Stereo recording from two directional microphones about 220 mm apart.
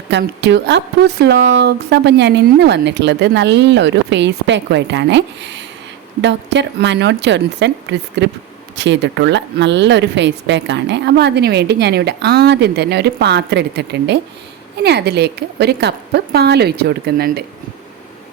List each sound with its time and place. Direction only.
0.1 s speech: 50° right (ahead or behind)